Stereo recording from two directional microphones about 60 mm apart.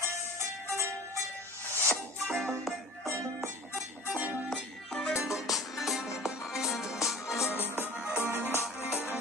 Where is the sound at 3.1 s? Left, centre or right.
Right.